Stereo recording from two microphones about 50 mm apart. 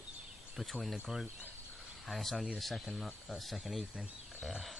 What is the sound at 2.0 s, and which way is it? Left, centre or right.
Speech, centre.